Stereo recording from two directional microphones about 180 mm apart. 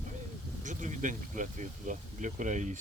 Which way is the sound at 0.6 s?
45° right (ahead or behind).